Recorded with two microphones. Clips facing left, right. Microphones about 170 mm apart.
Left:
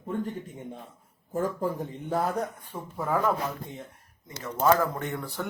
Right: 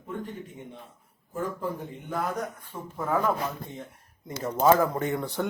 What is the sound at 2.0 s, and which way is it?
Speech, 30° left (ahead or behind).